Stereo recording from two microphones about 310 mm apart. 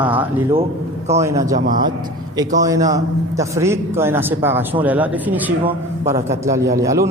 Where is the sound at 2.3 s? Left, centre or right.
Centre.